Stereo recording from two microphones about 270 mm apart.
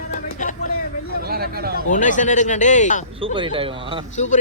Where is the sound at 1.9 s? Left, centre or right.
Left.